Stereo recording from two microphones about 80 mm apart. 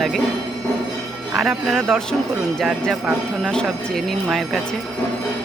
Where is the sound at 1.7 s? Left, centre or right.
Centre.